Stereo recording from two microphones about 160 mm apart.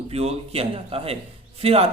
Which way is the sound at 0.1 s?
40° right (ahead or behind).